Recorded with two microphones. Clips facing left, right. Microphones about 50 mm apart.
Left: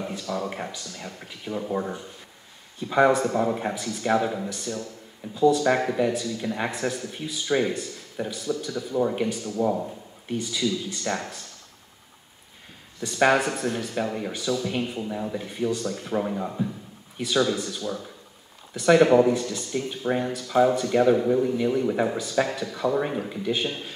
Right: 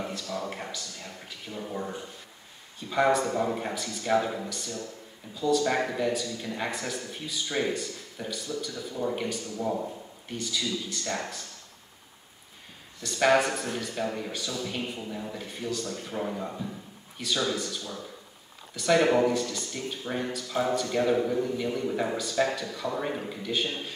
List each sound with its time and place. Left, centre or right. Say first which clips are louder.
0.1 s a man's voice: left 4 dB; centre
3.1 s speech: left 3 dB; centre
5.5 s a man's voice: even; centre
13.0 s speech: left 2 dB; centre
13.4 s speech: left 2 dB; centre